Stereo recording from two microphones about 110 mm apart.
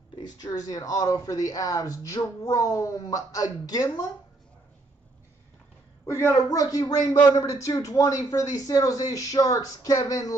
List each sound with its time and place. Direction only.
0.2 s speech: 35° left (ahead or behind)
6.0 s speech: 25° left (ahead or behind)